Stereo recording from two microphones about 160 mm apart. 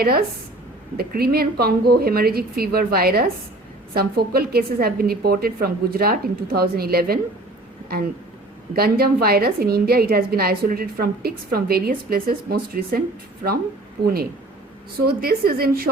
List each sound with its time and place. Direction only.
0.0 s a woman's voice: 70° right (ahead or behind)
8.7 s a woman's voice: 75° right (ahead or behind)
15.0 s a woman's voice: 75° right (ahead or behind)